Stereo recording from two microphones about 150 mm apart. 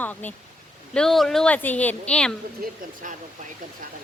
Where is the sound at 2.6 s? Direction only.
85° right.